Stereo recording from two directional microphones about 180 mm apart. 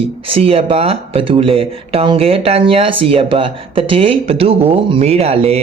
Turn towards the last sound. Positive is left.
turn(degrees=-35)  # may be behind; listen again after turning